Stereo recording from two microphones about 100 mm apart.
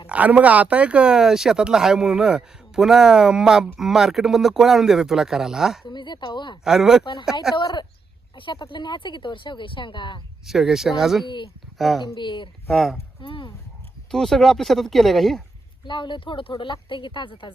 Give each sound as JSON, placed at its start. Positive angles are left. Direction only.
{"t": 0.1, "sound": "speech", "side_deg": -15}
{"t": 5.8, "sound": "speech", "side_deg": 50}
{"t": 6.7, "sound": "speech", "side_deg": -5}
{"t": 7.0, "sound": "speech", "side_deg": 55}
{"t": 10.4, "sound": "speech", "side_deg": -5}
{"t": 12.0, "sound": "speech", "side_deg": 50}
{"t": 12.7, "sound": "speech", "side_deg": 0}
{"t": 13.2, "sound": "speech", "side_deg": 55}
{"t": 14.1, "sound": "speech", "side_deg": 5}
{"t": 15.9, "sound": "speech", "side_deg": 50}